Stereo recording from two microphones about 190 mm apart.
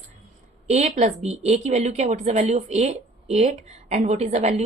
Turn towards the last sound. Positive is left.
turn(degrees=-35)  # may be behind; listen again after turning